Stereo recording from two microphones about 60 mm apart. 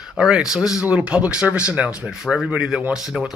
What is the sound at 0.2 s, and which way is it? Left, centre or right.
Speech, centre.